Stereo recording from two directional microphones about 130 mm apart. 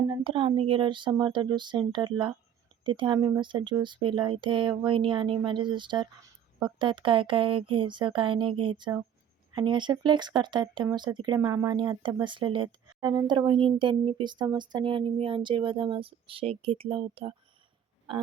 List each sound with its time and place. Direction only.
0.0 s speech: 45° right (ahead or behind)